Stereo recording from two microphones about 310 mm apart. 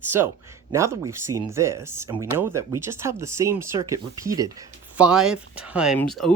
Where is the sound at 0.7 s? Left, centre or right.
Centre.